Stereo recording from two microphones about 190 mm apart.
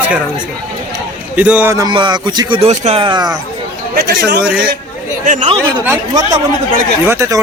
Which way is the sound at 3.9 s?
60° right (ahead or behind).